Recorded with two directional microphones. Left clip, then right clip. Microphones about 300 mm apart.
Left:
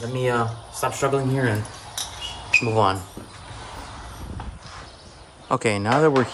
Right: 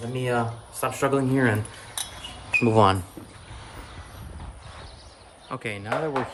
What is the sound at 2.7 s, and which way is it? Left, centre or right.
Speech, right.